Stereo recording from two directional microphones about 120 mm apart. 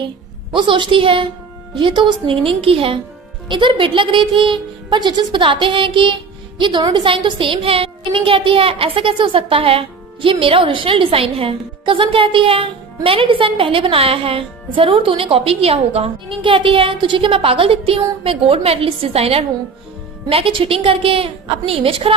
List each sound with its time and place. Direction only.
0.5 s a woman's voice: 40° right (ahead or behind)